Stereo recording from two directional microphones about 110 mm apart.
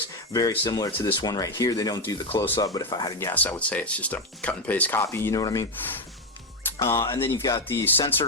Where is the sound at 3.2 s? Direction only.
15° left (ahead or behind).